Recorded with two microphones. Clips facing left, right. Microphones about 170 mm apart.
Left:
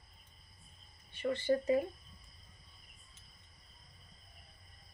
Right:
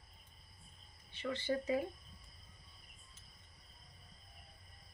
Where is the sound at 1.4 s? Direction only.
30° left (ahead or behind).